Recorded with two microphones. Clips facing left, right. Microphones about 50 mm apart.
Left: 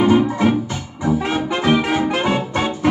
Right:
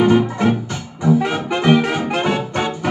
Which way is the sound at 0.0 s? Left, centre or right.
Centre.